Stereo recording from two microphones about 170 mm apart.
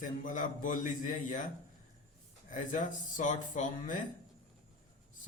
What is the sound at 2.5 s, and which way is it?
Speech, 50° left (ahead or behind).